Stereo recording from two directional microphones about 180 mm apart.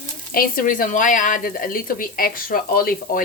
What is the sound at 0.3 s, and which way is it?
A woman's voice, 50° left (ahead or behind).